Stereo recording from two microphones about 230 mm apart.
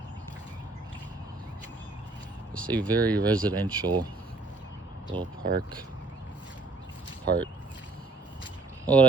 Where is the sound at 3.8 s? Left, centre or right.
Centre.